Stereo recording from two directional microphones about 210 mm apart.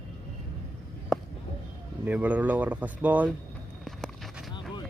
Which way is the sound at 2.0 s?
5° right (ahead or behind).